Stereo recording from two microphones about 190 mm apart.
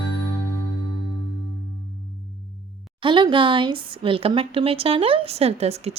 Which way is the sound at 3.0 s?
25° right (ahead or behind).